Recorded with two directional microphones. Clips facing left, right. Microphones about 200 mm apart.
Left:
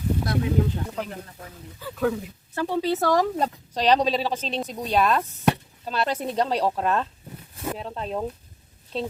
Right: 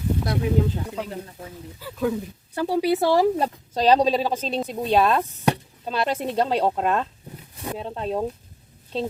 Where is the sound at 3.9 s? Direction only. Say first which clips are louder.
Right 3 dB; 35° right (ahead or behind).